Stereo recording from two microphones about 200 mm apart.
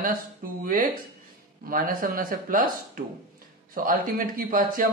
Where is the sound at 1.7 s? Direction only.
45° right (ahead or behind).